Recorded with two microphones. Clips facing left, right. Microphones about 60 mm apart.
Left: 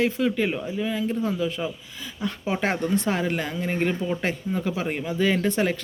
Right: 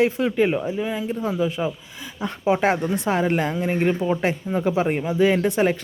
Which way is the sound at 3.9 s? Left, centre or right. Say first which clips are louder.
Right 4 dB; right.